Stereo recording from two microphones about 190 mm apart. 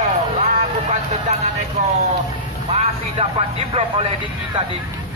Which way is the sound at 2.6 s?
35° right (ahead or behind).